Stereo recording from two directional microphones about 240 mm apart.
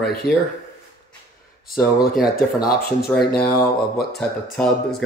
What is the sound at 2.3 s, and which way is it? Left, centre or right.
Speech, left.